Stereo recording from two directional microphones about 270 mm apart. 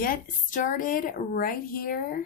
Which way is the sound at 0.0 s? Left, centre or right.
Left.